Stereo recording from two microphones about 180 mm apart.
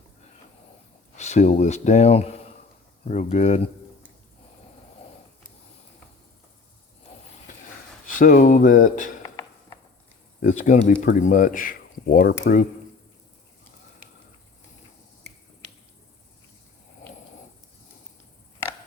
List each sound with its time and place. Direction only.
1.1 s speech: 40° left (ahead or behind)
8.0 s speech: 50° left (ahead or behind)
9.2 s a sound: 20° left (ahead or behind)
10.4 s speech: 45° left (ahead or behind)